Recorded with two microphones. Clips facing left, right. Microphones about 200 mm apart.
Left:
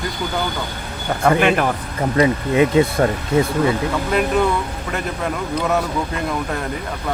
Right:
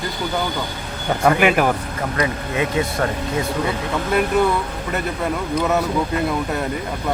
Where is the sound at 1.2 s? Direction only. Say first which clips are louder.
Even; 10° right (ahead or behind).